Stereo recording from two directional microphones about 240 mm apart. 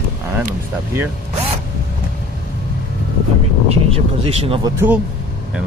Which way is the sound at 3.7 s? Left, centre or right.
Right.